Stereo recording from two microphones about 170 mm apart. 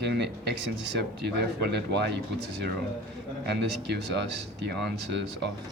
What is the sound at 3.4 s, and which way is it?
Speech, 75° right (ahead or behind).